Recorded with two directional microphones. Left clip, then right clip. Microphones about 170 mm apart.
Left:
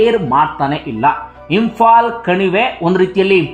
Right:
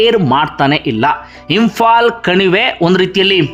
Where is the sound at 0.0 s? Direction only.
25° right (ahead or behind).